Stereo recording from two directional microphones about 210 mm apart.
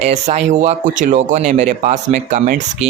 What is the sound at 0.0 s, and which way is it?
Speech, 30° right (ahead or behind).